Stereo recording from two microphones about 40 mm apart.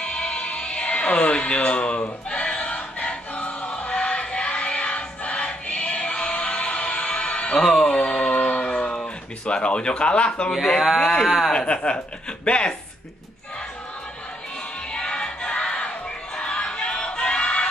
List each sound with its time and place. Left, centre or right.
0.0 s music: left
3.3 s choir: left
3.9 s music: left
8.3 s a sound: left
11.0 s speech: centre
11.5 s speech: left
14.9 s music: left
16.3 s crowd: left